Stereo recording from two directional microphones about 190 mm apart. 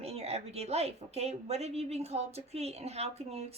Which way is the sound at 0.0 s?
35° right (ahead or behind).